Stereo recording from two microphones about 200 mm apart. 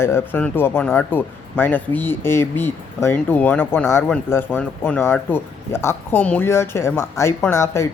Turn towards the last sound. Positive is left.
turn(degrees=15)  # may be behind; listen again after turning